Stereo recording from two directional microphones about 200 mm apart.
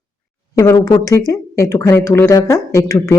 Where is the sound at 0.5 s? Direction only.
15° left (ahead or behind).